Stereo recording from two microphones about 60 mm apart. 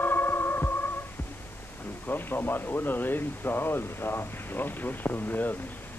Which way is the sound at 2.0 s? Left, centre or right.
Left.